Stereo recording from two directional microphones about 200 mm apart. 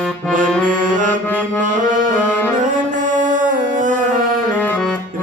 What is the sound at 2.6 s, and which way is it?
Music, 40° right (ahead or behind).